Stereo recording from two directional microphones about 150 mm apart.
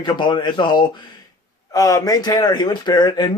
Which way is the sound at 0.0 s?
30° left (ahead or behind).